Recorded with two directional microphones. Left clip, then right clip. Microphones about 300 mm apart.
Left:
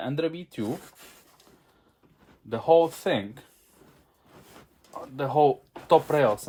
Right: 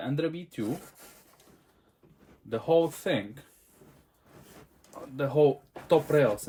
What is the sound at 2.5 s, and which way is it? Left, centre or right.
Speech, centre.